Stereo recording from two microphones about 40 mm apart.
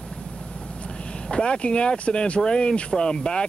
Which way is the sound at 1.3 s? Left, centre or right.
Left.